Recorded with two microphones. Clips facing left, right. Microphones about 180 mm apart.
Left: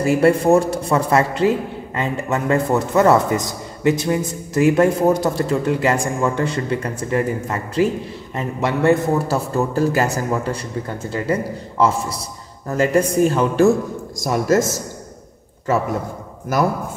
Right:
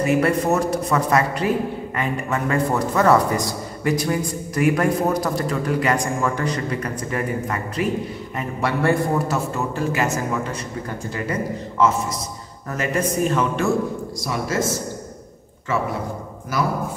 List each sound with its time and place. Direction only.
0.0 s a man's voice: 30° left (ahead or behind)
9.3 s a man's voice: 35° left (ahead or behind)
12.6 s a man's voice: 30° left (ahead or behind)
14.2 s speech: 45° left (ahead or behind)